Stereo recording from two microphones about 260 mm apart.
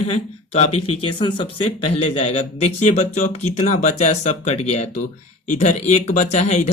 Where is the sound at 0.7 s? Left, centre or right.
Left.